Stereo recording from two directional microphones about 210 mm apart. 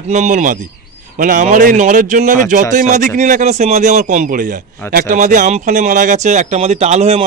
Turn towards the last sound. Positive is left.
turn(degrees=-30)  # may be behind; listen again after turning